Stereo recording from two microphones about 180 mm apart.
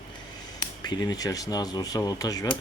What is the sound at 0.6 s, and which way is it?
Speech, 20° left (ahead or behind).